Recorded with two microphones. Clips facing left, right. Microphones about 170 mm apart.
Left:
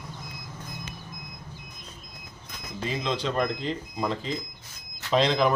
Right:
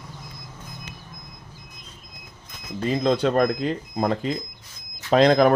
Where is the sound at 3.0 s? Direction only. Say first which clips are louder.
Right 8 dB; 50° right (ahead or behind).